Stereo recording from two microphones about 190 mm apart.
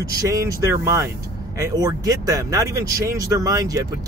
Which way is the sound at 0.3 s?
20° right (ahead or behind).